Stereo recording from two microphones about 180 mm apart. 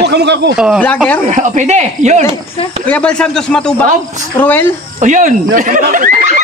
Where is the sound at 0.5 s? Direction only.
5° right (ahead or behind).